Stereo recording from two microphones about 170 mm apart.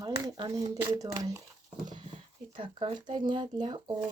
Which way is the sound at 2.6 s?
30° right (ahead or behind).